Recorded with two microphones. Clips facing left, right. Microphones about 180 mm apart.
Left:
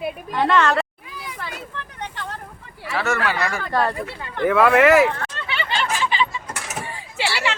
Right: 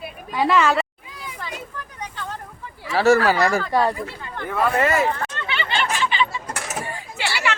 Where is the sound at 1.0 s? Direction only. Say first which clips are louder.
Left 1 dB; 70° left (ahead or behind).